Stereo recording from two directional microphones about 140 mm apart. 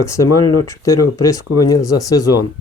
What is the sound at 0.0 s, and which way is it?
Speech, 20° left (ahead or behind).